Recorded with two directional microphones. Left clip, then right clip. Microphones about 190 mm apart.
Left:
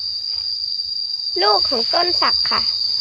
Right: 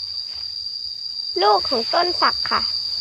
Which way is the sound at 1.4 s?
15° right (ahead or behind).